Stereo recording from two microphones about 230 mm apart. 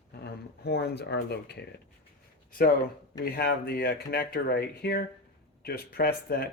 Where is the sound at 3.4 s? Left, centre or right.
Left.